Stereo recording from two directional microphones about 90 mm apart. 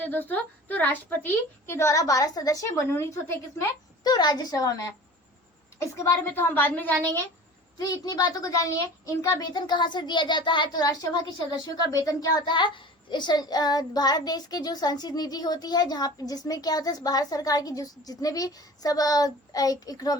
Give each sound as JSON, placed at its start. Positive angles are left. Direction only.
{"t": 0.0, "sound": "a woman's voice", "side_deg": 20}
{"t": 4.0, "sound": "a child's voice", "side_deg": 50}
{"t": 6.0, "sound": "a woman's voice", "side_deg": 30}
{"t": 7.8, "sound": "a child's voice", "side_deg": 45}
{"t": 10.8, "sound": "a child's voice", "side_deg": 40}
{"t": 12.5, "sound": "a child's voice", "side_deg": 60}